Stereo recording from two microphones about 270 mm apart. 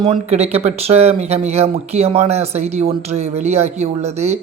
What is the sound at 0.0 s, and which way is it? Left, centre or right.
Speech, right.